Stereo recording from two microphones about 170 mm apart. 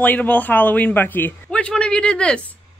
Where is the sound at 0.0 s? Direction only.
10° left (ahead or behind).